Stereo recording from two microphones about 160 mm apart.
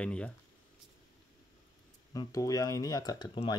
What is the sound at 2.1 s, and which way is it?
Speech, 20° left (ahead or behind).